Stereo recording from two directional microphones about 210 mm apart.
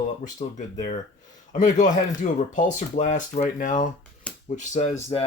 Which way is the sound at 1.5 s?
35° left (ahead or behind).